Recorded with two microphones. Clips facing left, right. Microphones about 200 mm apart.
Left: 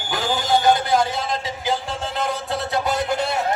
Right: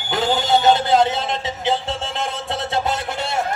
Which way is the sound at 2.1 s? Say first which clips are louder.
Left 1 dB; 25° right (ahead or behind).